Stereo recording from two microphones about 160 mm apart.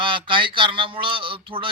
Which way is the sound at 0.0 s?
30° right (ahead or behind).